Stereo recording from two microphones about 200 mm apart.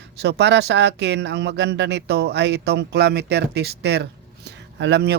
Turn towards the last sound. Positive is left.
turn(degrees=-55)  # may be behind; listen again after turning